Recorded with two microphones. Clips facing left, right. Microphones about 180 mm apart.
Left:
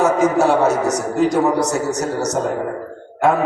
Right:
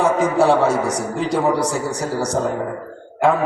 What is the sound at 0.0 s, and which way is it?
A man's voice, 30° right (ahead or behind).